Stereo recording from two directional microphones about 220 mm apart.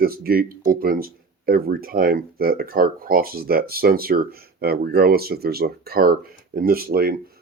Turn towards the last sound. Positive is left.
turn(degrees=-45)  # may be behind; listen again after turning